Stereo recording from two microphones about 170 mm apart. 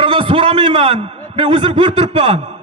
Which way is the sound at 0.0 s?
30° right (ahead or behind).